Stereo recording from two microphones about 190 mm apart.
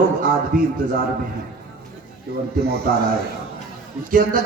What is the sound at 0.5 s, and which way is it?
Speech, 45° right (ahead or behind).